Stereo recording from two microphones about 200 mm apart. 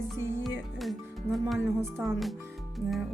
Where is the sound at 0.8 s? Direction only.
Centre (ahead or behind).